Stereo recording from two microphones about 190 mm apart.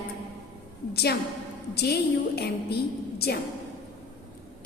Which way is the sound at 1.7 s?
60° left (ahead or behind).